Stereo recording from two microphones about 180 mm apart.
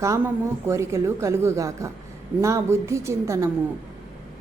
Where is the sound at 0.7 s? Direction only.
15° right (ahead or behind).